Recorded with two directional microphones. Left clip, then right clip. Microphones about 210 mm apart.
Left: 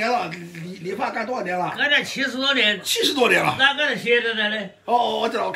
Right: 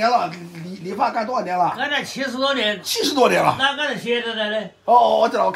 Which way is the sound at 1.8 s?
30° right (ahead or behind).